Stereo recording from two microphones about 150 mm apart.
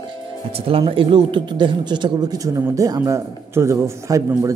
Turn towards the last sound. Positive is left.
turn(degrees=-20)  # may be behind; listen again after turning